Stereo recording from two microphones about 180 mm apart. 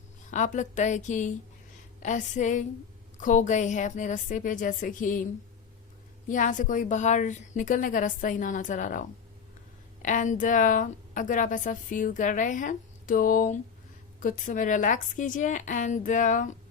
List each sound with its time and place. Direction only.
0.3 s a woman's voice: 45° left (ahead or behind)
6.2 s a woman's voice: 45° left (ahead or behind)